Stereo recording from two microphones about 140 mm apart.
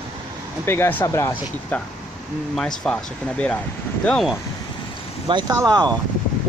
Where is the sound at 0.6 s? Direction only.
15° left (ahead or behind).